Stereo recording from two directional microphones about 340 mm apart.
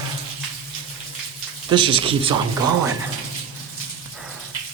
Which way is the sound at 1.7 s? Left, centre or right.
Centre.